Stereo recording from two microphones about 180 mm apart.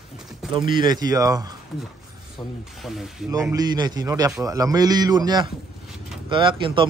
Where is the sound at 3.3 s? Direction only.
20° right (ahead or behind).